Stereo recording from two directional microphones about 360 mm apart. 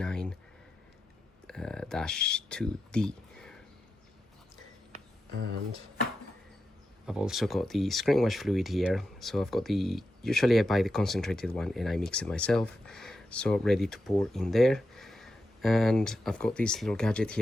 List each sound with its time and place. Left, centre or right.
0.0 s a sound: centre
1.5 s speech: centre
5.3 s speech: right
7.0 s speech: centre